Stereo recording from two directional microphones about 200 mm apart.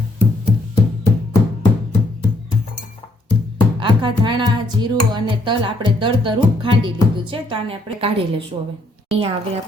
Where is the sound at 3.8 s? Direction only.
25° right (ahead or behind).